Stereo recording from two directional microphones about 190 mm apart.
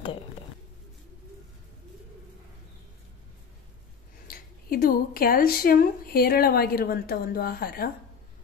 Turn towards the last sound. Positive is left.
turn(degrees=50)  # may be behind; listen again after turning